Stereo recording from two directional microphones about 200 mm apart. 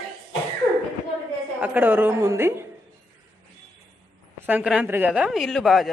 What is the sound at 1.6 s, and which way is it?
Speech, 10° right (ahead or behind).